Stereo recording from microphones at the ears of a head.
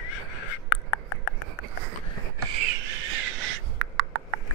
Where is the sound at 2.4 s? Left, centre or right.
Right.